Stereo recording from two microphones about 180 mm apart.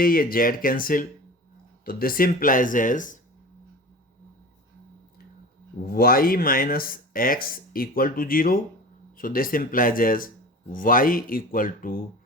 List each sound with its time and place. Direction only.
0.0 s speech: 55° left (ahead or behind)
5.8 s speech: 55° left (ahead or behind)